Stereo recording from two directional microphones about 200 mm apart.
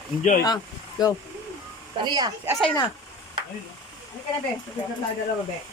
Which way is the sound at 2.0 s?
20° right (ahead or behind).